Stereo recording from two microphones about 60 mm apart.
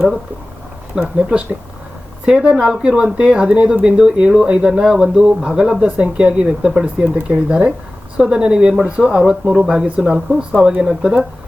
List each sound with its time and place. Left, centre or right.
1.0 s speech: centre